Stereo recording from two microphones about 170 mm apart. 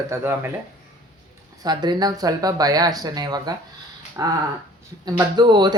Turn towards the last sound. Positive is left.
turn(degrees=-25)  # may be behind; listen again after turning